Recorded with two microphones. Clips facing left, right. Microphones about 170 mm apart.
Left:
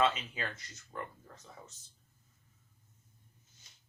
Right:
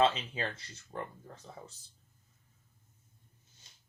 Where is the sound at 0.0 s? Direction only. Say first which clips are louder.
Right 3 dB; 30° right (ahead or behind).